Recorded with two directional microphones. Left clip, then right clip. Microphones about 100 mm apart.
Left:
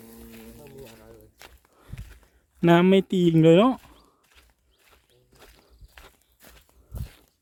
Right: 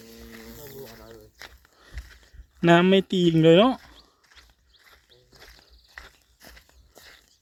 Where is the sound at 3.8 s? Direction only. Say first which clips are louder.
Right 3 dB; 15° left (ahead or behind).